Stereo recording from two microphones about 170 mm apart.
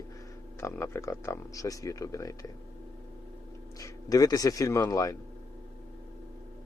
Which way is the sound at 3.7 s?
20° left (ahead or behind).